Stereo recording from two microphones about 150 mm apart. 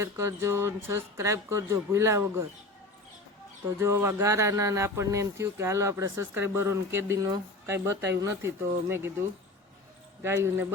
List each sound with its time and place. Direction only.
0.0 s speech: 20° right (ahead or behind)
3.8 s speech: 15° right (ahead or behind)
10.2 s speech: 15° right (ahead or behind)